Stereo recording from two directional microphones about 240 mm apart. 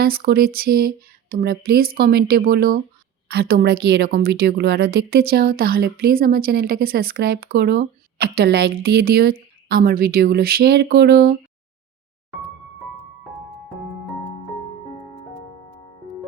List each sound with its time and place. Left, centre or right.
0.0 s a woman's voice: right